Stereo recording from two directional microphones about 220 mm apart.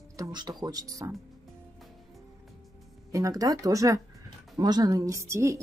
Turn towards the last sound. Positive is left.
turn(degrees=-15)  # may be behind; listen again after turning